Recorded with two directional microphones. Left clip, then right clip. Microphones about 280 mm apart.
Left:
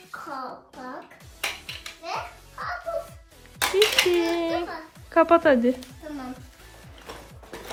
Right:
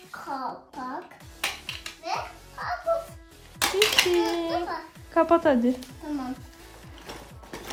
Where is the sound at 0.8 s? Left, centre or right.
Centre.